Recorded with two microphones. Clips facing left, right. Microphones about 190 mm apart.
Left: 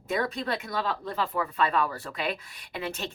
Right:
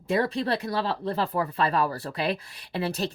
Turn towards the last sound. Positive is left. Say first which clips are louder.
# right 5 dB
turn(degrees=-35)  # may be behind; listen again after turning